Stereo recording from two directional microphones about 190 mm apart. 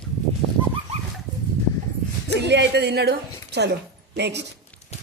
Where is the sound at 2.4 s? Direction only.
65° right (ahead or behind).